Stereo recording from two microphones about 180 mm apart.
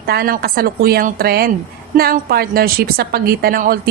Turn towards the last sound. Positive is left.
turn(degrees=-55)  # may be behind; listen again after turning